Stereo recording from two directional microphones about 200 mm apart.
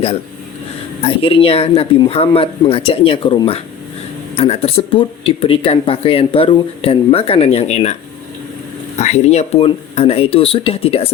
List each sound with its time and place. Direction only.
1.0 s speech: 25° left (ahead or behind)
9.0 s speech: 35° left (ahead or behind)